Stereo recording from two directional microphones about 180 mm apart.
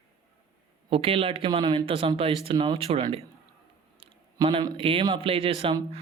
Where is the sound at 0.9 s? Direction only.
30° right (ahead or behind).